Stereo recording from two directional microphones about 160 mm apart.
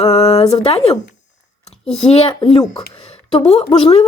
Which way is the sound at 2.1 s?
40° left (ahead or behind).